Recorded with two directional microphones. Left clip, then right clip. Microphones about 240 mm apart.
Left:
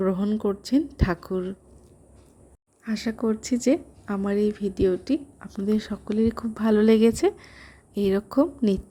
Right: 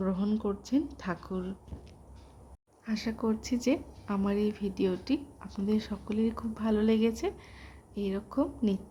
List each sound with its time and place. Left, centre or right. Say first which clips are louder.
0.0 s speech: left 7 dB; centre
2.8 s speech: left 6 dB; left